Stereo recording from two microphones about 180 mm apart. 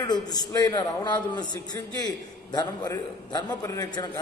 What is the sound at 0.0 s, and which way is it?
A man's voice, 25° left (ahead or behind).